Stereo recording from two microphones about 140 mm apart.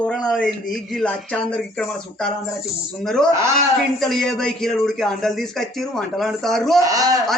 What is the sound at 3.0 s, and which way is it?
Speech, centre (ahead or behind).